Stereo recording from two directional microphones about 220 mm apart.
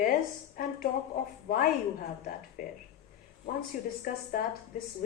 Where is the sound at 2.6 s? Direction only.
35° left (ahead or behind).